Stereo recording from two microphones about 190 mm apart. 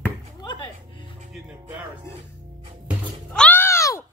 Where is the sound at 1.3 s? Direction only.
5° right (ahead or behind).